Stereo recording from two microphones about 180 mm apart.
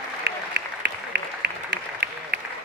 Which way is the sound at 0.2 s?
70° right (ahead or behind).